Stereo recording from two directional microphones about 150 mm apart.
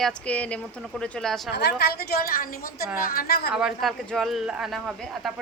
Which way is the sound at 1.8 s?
90° left.